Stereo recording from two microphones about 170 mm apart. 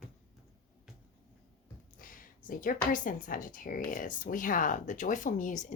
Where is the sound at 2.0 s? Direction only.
55° left (ahead or behind).